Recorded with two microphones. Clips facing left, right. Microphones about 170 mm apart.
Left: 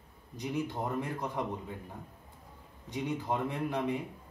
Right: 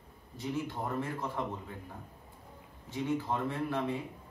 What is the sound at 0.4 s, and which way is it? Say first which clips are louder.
Speech: left 1 dB; 15° left (ahead or behind).